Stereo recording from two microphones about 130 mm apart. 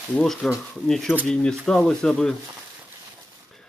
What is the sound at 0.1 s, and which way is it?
Speech, 5° left (ahead or behind).